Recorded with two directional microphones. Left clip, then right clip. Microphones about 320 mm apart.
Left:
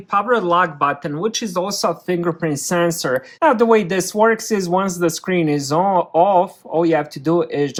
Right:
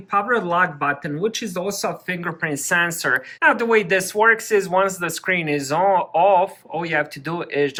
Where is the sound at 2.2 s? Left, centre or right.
Right.